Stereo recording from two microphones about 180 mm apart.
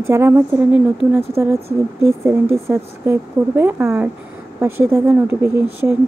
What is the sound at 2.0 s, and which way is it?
Speech, 15° right (ahead or behind).